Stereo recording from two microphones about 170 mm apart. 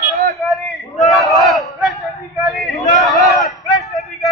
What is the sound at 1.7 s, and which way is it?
A man's voice, centre (ahead or behind).